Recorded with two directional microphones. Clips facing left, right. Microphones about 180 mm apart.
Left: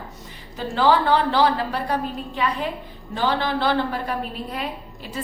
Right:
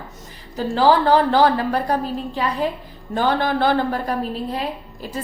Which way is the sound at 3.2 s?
50° right (ahead or behind).